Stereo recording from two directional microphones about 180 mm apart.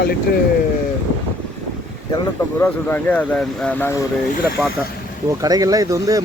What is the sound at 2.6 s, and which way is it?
Speech, 10° left (ahead or behind).